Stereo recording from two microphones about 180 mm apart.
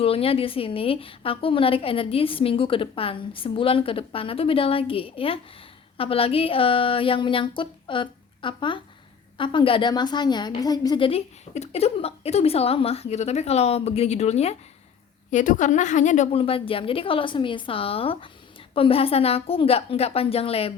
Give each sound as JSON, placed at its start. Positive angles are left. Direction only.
{"t": 0.0, "sound": "a woman's voice", "side_deg": 30}